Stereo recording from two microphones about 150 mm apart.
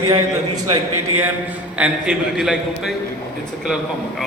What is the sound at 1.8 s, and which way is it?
A man's voice, 5° right (ahead or behind).